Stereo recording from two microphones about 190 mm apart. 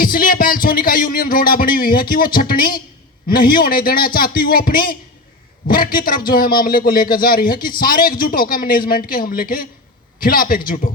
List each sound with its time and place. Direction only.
0.0 s a man's voice: 50° left (ahead or behind)